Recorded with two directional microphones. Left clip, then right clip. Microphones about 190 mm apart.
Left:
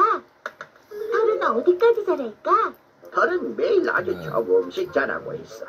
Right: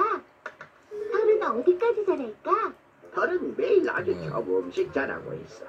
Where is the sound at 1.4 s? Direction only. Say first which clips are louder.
Left 5 dB; 45° left (ahead or behind).